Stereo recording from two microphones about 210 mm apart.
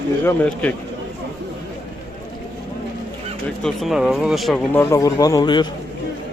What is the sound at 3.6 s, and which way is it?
Speech, centre (ahead or behind).